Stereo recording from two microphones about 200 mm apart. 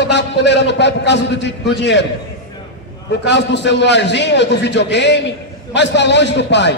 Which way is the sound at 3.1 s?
60° left (ahead or behind).